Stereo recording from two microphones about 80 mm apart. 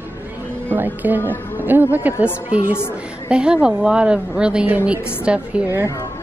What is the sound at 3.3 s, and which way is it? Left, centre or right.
A woman's voice, centre.